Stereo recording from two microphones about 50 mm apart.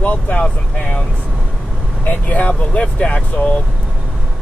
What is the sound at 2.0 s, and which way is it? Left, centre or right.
Speech, left.